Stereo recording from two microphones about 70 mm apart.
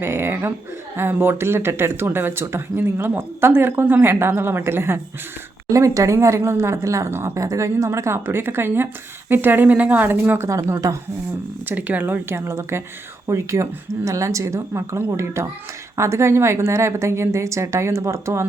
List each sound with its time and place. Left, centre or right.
0.0 s speech: right
5.6 s a woman's voice: right
10.8 s speech: right
11.6 s a woman's voice: right